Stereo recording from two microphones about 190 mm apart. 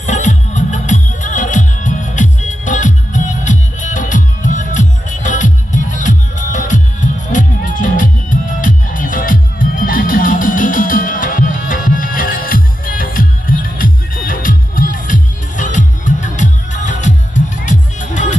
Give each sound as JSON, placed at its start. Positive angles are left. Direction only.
{"t": 0.0, "sound": "music", "side_deg": 40}